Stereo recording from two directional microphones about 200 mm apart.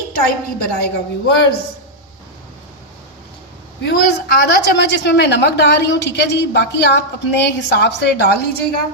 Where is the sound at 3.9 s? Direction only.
55° left (ahead or behind).